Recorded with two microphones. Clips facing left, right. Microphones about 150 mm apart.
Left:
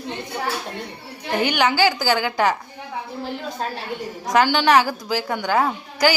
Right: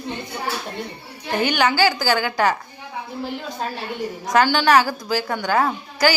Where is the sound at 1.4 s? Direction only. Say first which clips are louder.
Even; 15° left (ahead or behind).